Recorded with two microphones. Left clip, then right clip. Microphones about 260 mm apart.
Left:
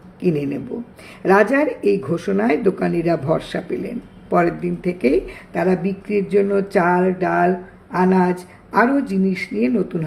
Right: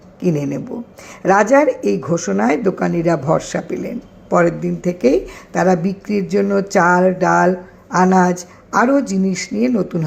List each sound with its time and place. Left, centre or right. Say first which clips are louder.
0.2 s speech: right 1 dB; centre